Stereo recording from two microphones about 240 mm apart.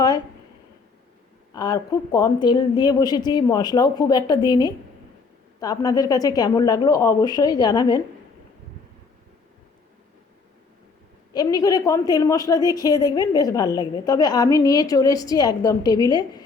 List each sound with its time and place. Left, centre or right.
1.5 s a woman's voice: centre
11.3 s a woman's voice: centre